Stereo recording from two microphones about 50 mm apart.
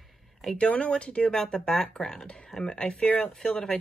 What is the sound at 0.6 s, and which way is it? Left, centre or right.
Speech, left.